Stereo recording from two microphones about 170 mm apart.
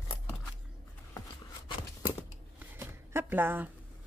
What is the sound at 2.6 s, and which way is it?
Shuffling cards, 15° right (ahead or behind).